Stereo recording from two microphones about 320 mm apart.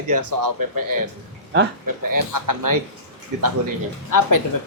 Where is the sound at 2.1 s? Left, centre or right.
Right.